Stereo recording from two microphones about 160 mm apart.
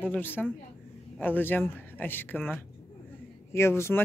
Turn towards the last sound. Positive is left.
turn(degrees=15)  # may be behind; listen again after turning